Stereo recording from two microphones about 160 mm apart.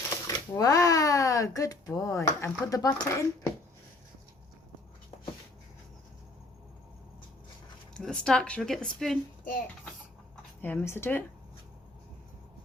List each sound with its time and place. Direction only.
0.3 s speech: 20° left (ahead or behind)
7.9 s a woman's voice: 5° left (ahead or behind)
9.4 s speech: 60° left (ahead or behind)
10.6 s speech: 10° left (ahead or behind)